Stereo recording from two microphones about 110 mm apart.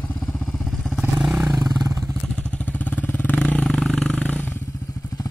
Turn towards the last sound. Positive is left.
turn(degrees=15)  # may be behind; listen again after turning